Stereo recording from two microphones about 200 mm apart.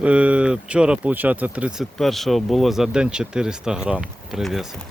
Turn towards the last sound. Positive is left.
turn(degrees=0)  # may be behind; listen again after turning